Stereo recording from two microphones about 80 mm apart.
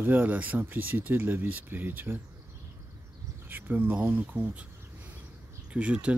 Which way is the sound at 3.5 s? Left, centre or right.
Right.